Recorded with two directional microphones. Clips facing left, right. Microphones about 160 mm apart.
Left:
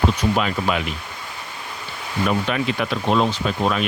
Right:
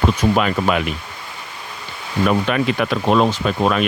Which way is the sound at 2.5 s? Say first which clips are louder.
Right 4 dB; 60° right (ahead or behind).